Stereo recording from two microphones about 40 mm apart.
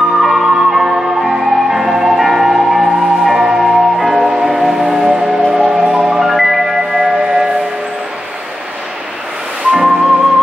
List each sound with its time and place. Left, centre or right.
0.2 s music: centre
5.7 s marimba: right
6.0 s music: centre
9.7 s music: centre